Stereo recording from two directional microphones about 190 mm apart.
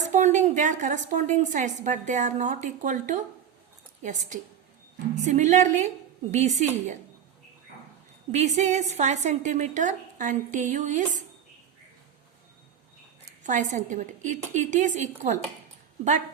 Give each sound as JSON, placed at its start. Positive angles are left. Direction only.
{"t": 0.0, "sound": "a woman's voice", "side_deg": -40}
{"t": 8.3, "sound": "a woman's voice", "side_deg": -35}
{"t": 13.4, "sound": "a woman's voice", "side_deg": -40}